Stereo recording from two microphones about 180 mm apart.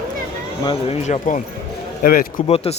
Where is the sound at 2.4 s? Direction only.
35° left (ahead or behind).